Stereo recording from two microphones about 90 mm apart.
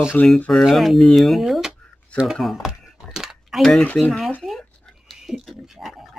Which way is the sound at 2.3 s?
Centre (ahead or behind).